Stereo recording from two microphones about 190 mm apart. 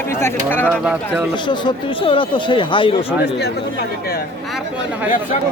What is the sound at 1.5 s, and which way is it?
Speech, 25° left (ahead or behind).